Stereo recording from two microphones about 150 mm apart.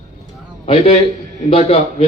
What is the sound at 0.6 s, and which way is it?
A man's voice, 40° left (ahead or behind).